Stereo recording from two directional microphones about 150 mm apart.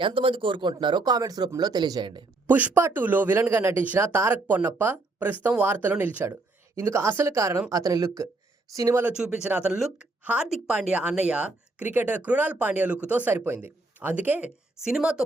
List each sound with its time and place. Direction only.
0.0 s speech: 35° right (ahead or behind)
2.5 s speech: 10° right (ahead or behind)
9.0 s speech: 10° right (ahead or behind)